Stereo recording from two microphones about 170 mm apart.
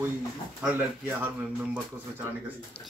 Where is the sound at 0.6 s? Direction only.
10° right (ahead or behind).